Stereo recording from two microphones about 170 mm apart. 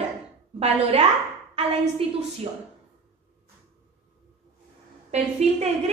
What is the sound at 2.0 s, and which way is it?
Speech, 35° right (ahead or behind).